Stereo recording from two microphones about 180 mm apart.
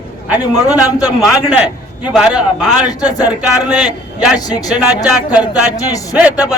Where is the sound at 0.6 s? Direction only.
20° left (ahead or behind).